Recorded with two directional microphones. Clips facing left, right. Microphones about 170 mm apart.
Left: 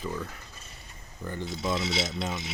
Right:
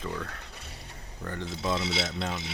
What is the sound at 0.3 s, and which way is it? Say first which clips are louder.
Mechanisms: right 3 dB; 75° right (ahead or behind).